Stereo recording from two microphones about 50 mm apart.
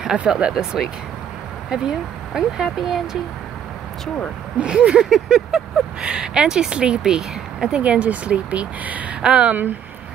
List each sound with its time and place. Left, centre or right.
0.0 s speech: centre
1.7 s speech: centre
4.6 s speech: right
5.1 s speech: centre
7.8 s speech: right
9.2 s speech: centre